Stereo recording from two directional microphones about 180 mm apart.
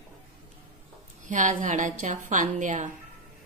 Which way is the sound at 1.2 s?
45° right (ahead or behind).